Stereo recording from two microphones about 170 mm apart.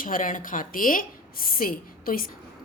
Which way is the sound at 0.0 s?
50° left (ahead or behind).